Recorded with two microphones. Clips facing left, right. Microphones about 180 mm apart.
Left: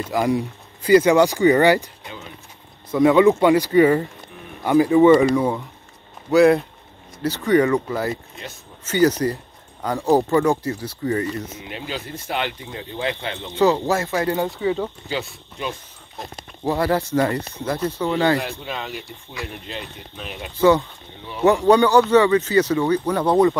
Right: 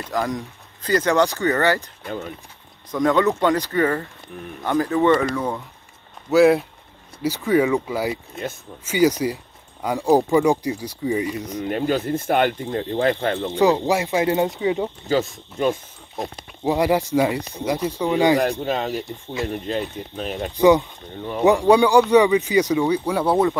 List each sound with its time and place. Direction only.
0.1 s speech: 10° left (ahead or behind)
2.0 s speech: 50° right (ahead or behind)
2.9 s speech: 10° left (ahead or behind)
6.3 s speech: 5° right (ahead or behind)
11.6 s speech: 50° right (ahead or behind)
13.6 s speech: 15° right (ahead or behind)
15.0 s speech: 40° right (ahead or behind)
16.6 s speech: 15° right (ahead or behind)
18.4 s speech: 40° right (ahead or behind)
20.5 s speech: 15° right (ahead or behind)
21.2 s speech: 45° right (ahead or behind)
21.6 s speech: 10° right (ahead or behind)